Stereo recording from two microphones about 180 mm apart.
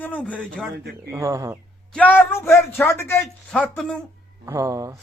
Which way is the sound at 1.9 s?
10° left (ahead or behind).